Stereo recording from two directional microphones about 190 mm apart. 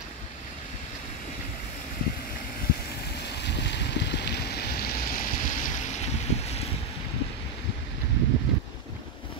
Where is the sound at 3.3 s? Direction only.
65° left (ahead or behind); by 6.6 s 35° left (ahead or behind).